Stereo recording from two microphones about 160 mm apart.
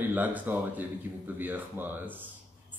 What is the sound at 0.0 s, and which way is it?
Speech, 10° right (ahead or behind).